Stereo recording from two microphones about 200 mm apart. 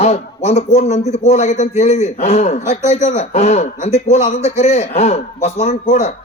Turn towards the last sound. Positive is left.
turn(degrees=35)  # may be behind; listen again after turning